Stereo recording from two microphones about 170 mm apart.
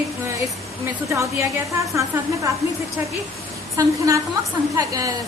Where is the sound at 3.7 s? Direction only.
20° right (ahead or behind).